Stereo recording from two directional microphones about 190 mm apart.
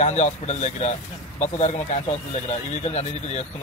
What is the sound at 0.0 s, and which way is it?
Speech, 40° left (ahead or behind).